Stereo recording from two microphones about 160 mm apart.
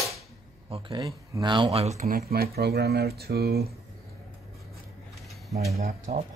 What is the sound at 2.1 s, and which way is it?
Speech, 70° right (ahead or behind).